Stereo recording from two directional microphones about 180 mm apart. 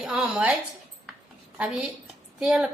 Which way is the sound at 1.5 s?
5° right (ahead or behind).